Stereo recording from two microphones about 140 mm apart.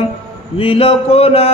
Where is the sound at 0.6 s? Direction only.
40° left (ahead or behind).